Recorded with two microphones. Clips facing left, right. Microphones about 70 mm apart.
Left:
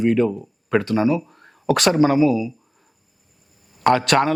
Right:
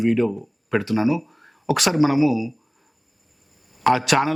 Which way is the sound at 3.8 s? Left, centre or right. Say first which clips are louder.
Left 2 dB; centre.